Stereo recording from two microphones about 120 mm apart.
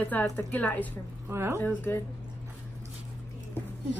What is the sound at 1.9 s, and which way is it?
Speech, 20° left (ahead or behind).